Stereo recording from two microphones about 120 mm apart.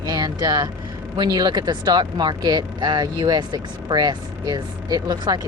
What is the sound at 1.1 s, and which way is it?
Speech, 35° right (ahead or behind).